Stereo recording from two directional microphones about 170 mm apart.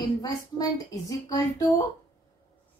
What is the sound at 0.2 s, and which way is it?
Speech, 20° left (ahead or behind).